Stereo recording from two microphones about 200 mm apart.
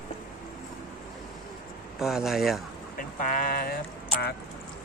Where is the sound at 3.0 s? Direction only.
45° left (ahead or behind).